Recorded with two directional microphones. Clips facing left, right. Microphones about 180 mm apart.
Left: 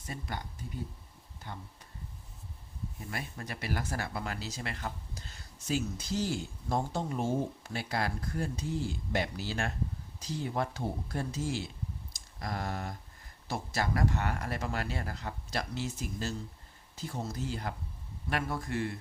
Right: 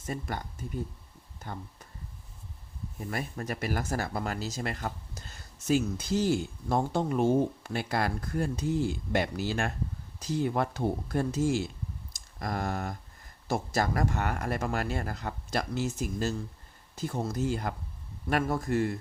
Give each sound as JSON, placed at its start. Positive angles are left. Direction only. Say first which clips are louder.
{"t": 0.1, "sound": "speech", "louder": "right 5 dB", "side_deg": -50}
{"t": 3.1, "sound": "speech", "louder": "right 7 dB", "side_deg": -45}